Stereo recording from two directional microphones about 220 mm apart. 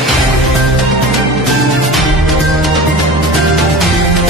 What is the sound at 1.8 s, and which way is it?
Music, centre (ahead or behind).